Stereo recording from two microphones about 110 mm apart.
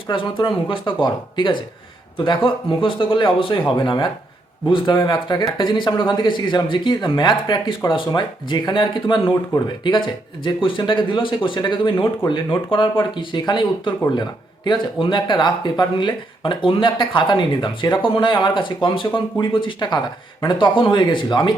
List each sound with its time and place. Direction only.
0.1 s speech: 50° left (ahead or behind)